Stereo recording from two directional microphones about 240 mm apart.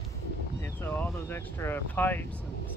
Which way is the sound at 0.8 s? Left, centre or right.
Centre.